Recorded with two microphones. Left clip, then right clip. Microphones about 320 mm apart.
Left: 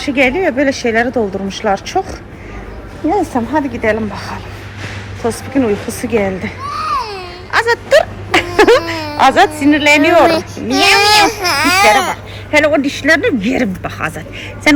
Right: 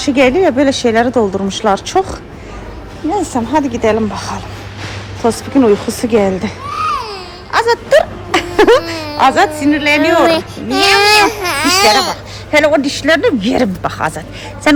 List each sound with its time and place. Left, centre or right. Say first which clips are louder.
0.0 s speech: right 3 dB; centre
1.1 s speech: right 3 dB; centre
1.5 s speech: right 2 dB; centre
3.1 s speech: even; centre
5.6 s speech: right 5 dB; centre
6.7 s a sound: right 1 dB; centre
7.5 s a sound: even; centre
8.8 s a woman's voice: even; centre